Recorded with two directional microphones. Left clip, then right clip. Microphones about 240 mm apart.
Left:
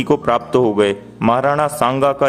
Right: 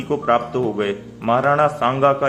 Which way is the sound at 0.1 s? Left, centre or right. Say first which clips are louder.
Left 3 dB; left.